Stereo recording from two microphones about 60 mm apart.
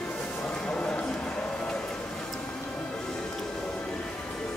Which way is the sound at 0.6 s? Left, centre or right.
Left.